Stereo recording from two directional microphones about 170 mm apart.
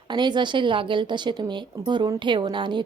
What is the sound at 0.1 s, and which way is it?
Speech, 25° right (ahead or behind).